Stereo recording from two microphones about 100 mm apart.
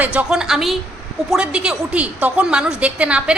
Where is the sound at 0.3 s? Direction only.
5° right (ahead or behind).